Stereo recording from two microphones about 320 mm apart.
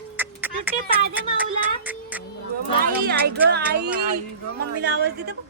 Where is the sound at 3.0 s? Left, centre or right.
Right.